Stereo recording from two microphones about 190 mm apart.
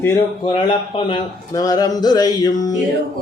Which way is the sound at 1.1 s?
20° left (ahead or behind).